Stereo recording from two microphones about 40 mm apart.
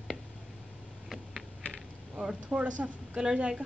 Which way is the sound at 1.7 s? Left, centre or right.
Right.